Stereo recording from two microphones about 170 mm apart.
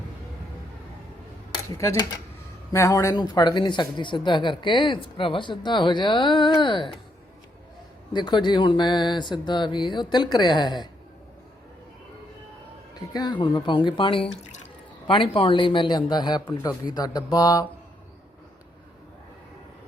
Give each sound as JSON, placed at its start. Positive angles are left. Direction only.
{"t": 1.8, "sound": "speech", "side_deg": 15}
{"t": 8.1, "sound": "speech", "side_deg": 25}
{"t": 13.1, "sound": "speech", "side_deg": 25}